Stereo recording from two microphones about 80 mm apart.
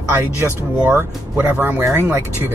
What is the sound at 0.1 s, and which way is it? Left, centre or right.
Speech, right.